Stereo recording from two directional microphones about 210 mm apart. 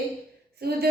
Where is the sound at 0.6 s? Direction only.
45° right (ahead or behind).